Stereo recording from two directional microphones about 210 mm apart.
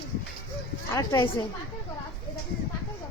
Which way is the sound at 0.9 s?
15° left (ahead or behind).